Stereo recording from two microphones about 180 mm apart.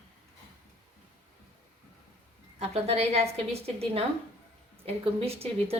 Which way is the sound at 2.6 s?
35° right (ahead or behind).